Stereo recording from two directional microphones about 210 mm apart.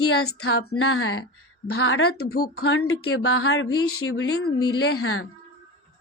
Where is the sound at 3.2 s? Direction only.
85° left.